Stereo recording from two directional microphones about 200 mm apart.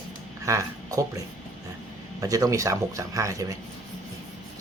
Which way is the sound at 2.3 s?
15° right (ahead or behind).